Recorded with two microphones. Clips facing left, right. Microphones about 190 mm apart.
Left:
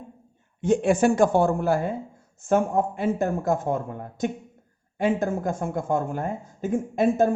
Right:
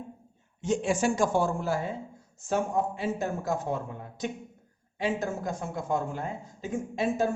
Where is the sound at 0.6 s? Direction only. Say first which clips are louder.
Left 7 dB; 55° left (ahead or behind).